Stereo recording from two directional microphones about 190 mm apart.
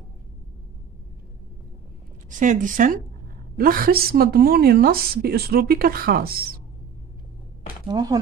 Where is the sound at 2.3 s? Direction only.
40° right (ahead or behind).